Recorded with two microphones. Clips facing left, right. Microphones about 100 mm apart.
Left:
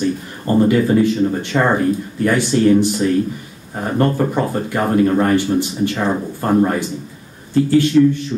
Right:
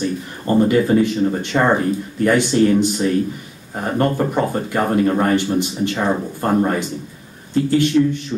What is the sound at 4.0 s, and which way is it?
Speech, 15° right (ahead or behind).